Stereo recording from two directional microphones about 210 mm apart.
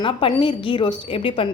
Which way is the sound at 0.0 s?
25° left (ahead or behind).